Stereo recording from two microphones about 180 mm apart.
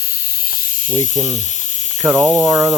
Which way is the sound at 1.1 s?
15° right (ahead or behind).